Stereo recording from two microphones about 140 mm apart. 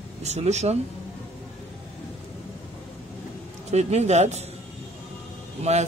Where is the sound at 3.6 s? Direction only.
50° right (ahead or behind).